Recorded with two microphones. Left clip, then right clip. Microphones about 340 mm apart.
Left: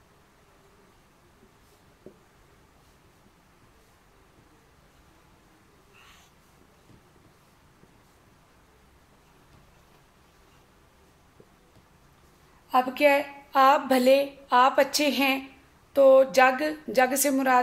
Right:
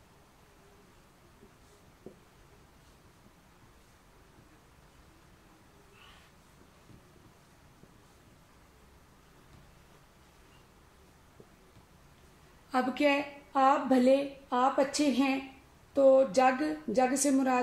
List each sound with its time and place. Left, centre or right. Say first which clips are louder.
12.9 s a woman's voice: left 6 dB; left